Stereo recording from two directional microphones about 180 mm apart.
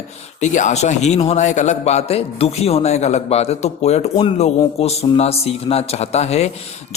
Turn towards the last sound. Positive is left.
turn(degrees=35)  # may be behind; listen again after turning